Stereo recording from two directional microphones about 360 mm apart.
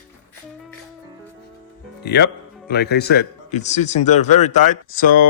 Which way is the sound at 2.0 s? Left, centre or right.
Left.